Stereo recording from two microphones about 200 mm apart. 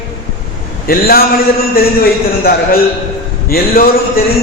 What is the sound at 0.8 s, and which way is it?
Speech, 45° left (ahead or behind).